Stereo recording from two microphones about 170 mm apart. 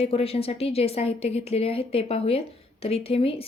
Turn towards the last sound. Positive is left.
turn(degrees=35)  # may be behind; listen again after turning